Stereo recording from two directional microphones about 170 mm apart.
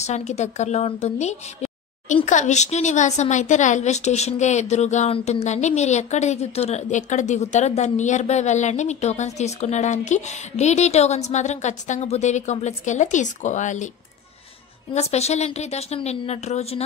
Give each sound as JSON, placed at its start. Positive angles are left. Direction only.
{"t": 0.0, "sound": "a woman's voice", "side_deg": 40}
{"t": 15.0, "sound": "a woman's voice", "side_deg": 40}